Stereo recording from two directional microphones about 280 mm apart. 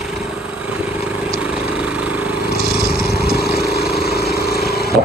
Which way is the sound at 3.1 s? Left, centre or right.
Left.